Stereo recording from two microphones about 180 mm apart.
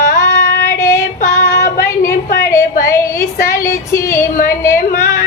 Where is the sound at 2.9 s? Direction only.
15° left (ahead or behind).